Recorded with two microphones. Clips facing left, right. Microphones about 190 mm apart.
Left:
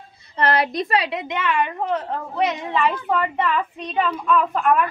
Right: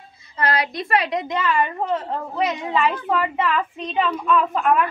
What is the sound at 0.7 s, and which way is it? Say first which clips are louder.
Speech: even; 20° left (ahead or behind).